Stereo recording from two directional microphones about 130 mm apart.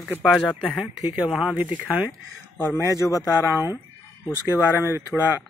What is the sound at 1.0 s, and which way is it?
Speech, 5° right (ahead or behind).